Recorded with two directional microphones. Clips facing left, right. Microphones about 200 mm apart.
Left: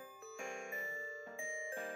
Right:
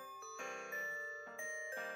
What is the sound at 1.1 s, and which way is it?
Music, 30° left (ahead or behind).